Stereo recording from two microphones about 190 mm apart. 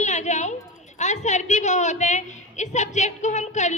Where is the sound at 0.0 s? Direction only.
40° left (ahead or behind).